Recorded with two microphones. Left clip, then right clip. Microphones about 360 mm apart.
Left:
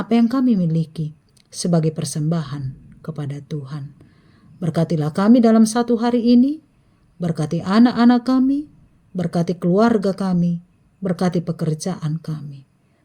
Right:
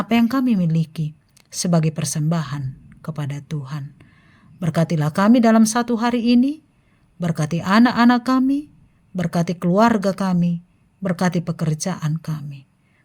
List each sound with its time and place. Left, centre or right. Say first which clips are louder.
0.0 s a woman's voice: left 1 dB; right